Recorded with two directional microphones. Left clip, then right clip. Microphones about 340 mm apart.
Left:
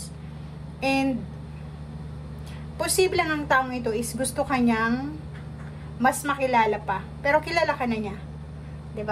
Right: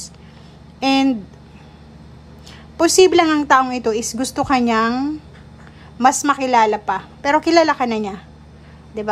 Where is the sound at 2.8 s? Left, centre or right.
Centre.